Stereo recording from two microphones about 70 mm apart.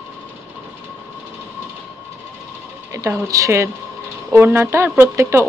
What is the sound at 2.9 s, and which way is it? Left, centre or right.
Speech, right.